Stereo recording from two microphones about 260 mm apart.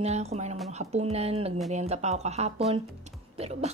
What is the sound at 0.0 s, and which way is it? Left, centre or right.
A woman's voice, right.